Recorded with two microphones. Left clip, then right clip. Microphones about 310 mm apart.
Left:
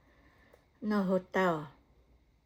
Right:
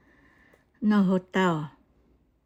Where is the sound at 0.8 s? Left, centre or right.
Right.